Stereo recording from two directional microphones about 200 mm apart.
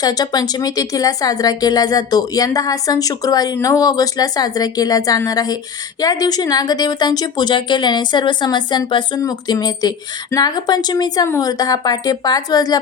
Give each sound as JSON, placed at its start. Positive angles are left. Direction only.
{"t": 0.0, "sound": "a woman's voice", "side_deg": 20}